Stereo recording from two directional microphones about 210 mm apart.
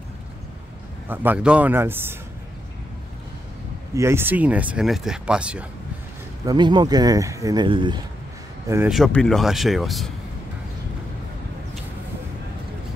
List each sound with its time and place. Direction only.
1.0 s a man's voice: 10° right (ahead or behind)
3.9 s speech: 10° right (ahead or behind)
6.4 s speech: 20° right (ahead or behind)
8.6 s speech: 10° right (ahead or behind)
8.9 s speech: centre (ahead or behind)